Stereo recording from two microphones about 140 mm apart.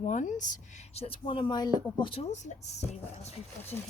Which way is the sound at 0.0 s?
60° left (ahead or behind).